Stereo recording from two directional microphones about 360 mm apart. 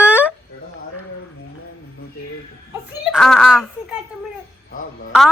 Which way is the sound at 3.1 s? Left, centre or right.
Centre.